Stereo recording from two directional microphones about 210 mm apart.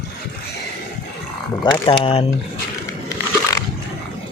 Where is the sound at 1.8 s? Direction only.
25° left (ahead or behind).